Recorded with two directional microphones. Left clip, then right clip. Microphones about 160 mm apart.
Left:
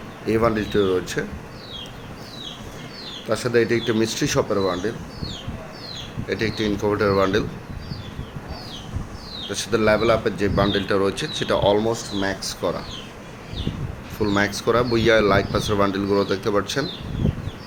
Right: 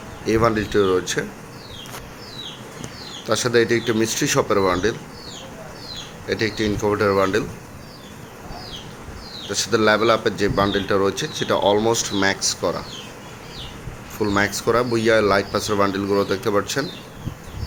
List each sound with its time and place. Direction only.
0.3 s a man's voice: 5° right (ahead or behind)
3.2 s a man's voice: 5° right (ahead or behind)
4.5 s speech: 30° right (ahead or behind)
6.2 s speech: 5° right (ahead or behind)
9.5 s a man's voice: 5° right (ahead or behind)
14.2 s speech: 5° right (ahead or behind)